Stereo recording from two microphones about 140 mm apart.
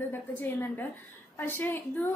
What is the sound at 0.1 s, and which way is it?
A woman's voice, 15° left (ahead or behind).